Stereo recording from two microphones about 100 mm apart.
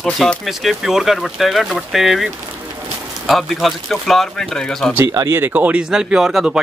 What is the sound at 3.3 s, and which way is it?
Speech, centre (ahead or behind).